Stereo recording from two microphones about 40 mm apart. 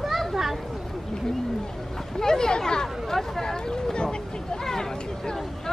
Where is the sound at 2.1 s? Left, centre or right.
Centre.